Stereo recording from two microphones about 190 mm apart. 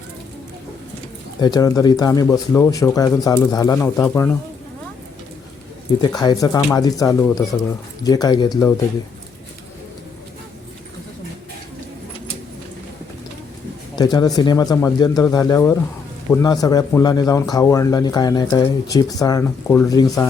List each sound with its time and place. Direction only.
1.4 s speech: 20° left (ahead or behind)
6.0 s speech: 20° left (ahead or behind)
13.9 s speech: 20° left (ahead or behind)